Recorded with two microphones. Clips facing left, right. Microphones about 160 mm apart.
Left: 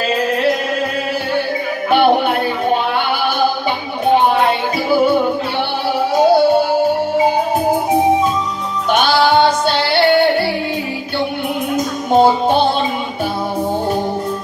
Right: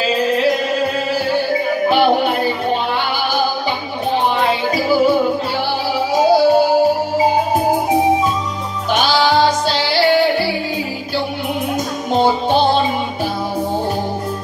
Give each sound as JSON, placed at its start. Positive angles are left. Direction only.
{"t": 0.1, "sound": "music", "side_deg": 0}
{"t": 1.9, "sound": "music", "side_deg": 0}
{"t": 4.4, "sound": "music", "side_deg": 0}
{"t": 6.1, "sound": "music", "side_deg": 0}
{"t": 9.7, "sound": "music", "side_deg": 60}
{"t": 10.0, "sound": "music", "side_deg": 0}
{"t": 11.7, "sound": "music", "side_deg": 0}